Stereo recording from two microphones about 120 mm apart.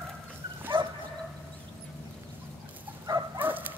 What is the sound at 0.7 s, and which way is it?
Dog, 45° right (ahead or behind).